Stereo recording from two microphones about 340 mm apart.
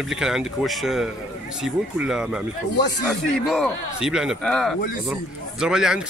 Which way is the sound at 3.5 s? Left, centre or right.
Centre.